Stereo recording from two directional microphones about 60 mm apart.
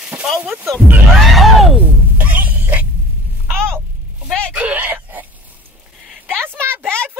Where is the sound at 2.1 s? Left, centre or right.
Right.